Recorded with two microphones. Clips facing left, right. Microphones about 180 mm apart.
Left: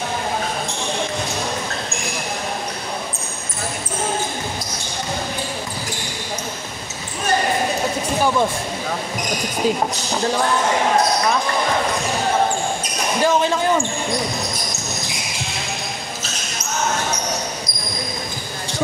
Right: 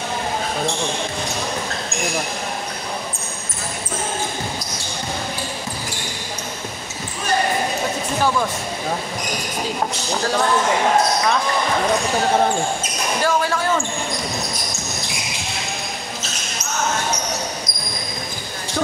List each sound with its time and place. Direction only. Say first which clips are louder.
13.2 s speech: left 3 dB; 20° left (ahead or behind)